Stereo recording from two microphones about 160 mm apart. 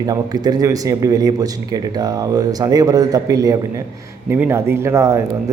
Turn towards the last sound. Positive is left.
turn(degrees=-20)  # may be behind; listen again after turning